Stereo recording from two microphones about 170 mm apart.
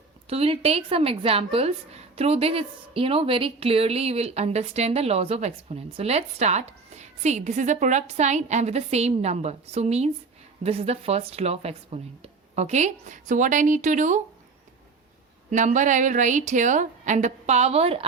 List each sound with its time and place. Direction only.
0.3 s a woman's voice: 35° right (ahead or behind)
15.4 s a woman's voice: 45° right (ahead or behind)